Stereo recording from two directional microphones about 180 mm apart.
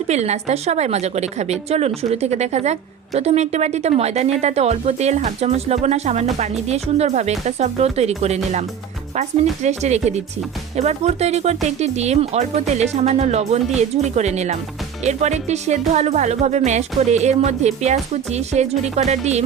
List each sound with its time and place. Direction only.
0.1 s a woman's voice: 40° right (ahead or behind)